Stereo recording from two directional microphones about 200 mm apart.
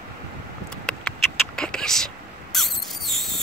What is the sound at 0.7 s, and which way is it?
Rodents, 5° left (ahead or behind).